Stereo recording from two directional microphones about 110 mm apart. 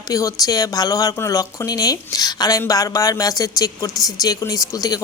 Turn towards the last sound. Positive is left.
turn(degrees=35)  # may be behind; listen again after turning